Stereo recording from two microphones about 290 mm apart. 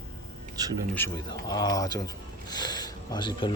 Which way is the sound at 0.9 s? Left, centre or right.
Centre.